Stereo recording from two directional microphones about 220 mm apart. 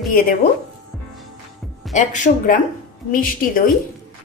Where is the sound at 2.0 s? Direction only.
35° left (ahead or behind).